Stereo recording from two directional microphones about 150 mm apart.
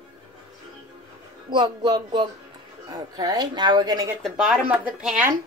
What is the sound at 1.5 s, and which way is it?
Speech, 30° right (ahead or behind).